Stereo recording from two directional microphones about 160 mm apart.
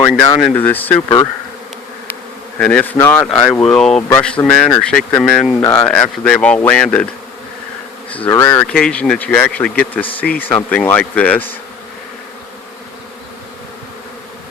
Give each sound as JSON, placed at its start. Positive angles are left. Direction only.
{"t": 0.1, "sound": "speech", "side_deg": 0}
{"t": 1.0, "sound": "bee", "side_deg": 25}
{"t": 2.6, "sound": "speech", "side_deg": 5}
{"t": 5.5, "sound": "speech", "side_deg": 15}
{"t": 5.9, "sound": "speech", "side_deg": 5}
{"t": 8.3, "sound": "speech", "side_deg": 15}